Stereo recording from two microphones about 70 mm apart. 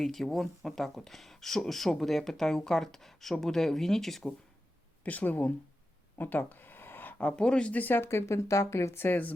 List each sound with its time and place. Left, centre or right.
0.0 s speech: centre
5.0 s speech: left
8.1 s speech: left